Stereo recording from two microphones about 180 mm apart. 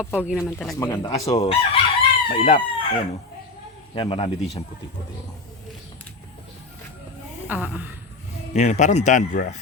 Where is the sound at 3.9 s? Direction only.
30° left (ahead or behind).